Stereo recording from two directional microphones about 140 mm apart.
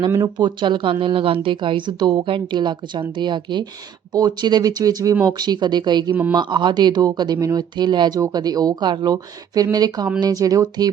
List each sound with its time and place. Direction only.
0.3 s speech: 35° right (ahead or behind)